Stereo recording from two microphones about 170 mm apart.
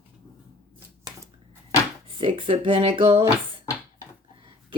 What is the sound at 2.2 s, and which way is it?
Speech, 30° right (ahead or behind).